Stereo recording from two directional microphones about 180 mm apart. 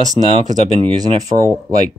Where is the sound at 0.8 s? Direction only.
30° right (ahead or behind).